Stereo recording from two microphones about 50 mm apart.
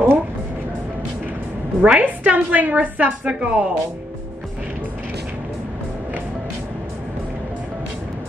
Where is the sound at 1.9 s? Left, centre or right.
Right.